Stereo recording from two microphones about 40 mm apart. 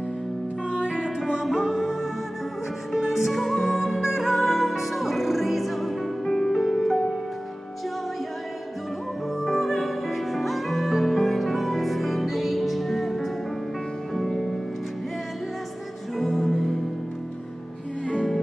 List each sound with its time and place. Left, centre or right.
0.7 s music: right
0.9 s music: centre
3.4 s music: centre
3.7 s music: centre
9.4 s music: centre
16.2 s music: centre